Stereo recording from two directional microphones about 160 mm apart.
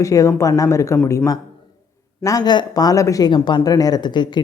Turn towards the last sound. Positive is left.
turn(degrees=30)  # may be behind; listen again after turning